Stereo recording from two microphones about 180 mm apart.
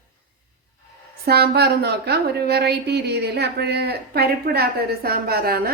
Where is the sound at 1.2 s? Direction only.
60° right (ahead or behind).